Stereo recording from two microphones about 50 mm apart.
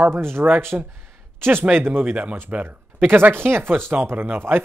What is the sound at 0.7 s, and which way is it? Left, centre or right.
Speech, right.